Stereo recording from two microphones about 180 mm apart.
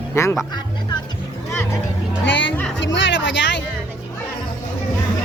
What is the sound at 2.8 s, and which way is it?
Speech, 90° left.